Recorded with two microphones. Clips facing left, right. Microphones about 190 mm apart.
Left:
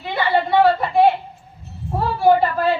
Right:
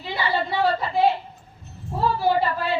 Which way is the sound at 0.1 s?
55° left (ahead or behind).